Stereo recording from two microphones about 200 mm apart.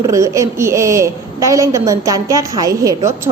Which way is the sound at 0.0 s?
15° right (ahead or behind).